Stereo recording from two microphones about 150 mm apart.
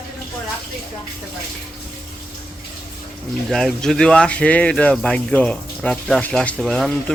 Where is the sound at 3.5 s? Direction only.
5° left (ahead or behind).